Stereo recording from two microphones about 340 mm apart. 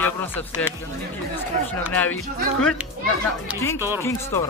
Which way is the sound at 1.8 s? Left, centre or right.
Centre.